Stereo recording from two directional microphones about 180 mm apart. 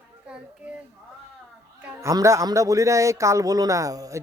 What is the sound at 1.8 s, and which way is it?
Speech, 15° right (ahead or behind).